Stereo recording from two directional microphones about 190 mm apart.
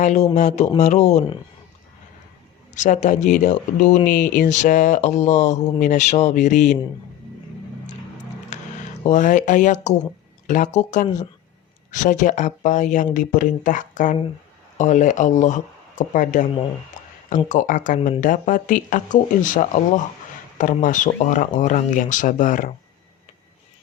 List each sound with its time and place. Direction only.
0.0 s speech: 35° left (ahead or behind)
2.7 s speech: 40° left (ahead or behind)
8.5 s a sound: 40° left (ahead or behind)
9.0 s speech: 40° left (ahead or behind)
17.5 s speech: 40° left (ahead or behind)